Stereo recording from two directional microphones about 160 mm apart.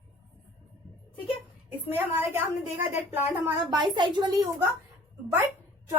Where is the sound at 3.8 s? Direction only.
30° right (ahead or behind).